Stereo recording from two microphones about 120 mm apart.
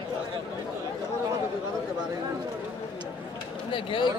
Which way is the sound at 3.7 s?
45° left (ahead or behind).